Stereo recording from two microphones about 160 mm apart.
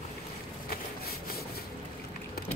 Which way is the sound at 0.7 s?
70° left (ahead or behind).